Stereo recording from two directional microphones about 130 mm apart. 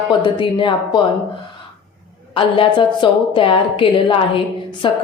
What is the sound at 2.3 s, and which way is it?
A woman's voice, 40° left (ahead or behind).